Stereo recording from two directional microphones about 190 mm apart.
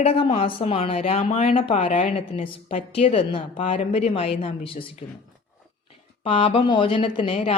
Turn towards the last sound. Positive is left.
turn(degrees=30)  # may be behind; listen again after turning